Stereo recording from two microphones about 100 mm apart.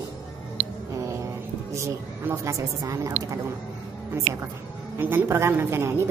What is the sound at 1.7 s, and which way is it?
A woman's voice, 30° right (ahead or behind).